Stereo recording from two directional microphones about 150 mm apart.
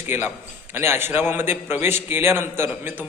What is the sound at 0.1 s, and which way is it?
A man's voice, 15° right (ahead or behind).